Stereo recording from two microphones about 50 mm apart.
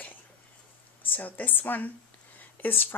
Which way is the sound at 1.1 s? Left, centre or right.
Left.